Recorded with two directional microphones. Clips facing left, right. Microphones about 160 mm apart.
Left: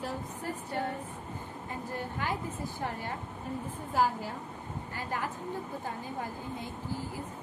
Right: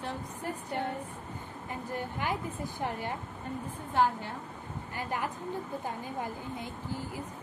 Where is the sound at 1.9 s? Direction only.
15° right (ahead or behind).